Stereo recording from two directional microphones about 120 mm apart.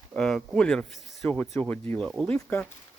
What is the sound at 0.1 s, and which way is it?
Speech, 5° left (ahead or behind).